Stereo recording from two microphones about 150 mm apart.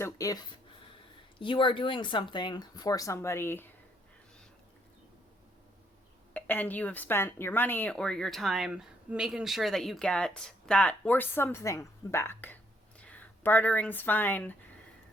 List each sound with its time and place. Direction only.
0.0 s speech: 20° left (ahead or behind)
1.4 s speech: 35° left (ahead or behind); by 3.7 s 15° left (ahead or behind)
6.3 s speech: 10° left (ahead or behind)